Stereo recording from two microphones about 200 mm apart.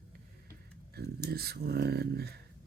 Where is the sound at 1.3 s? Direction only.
50° right (ahead or behind).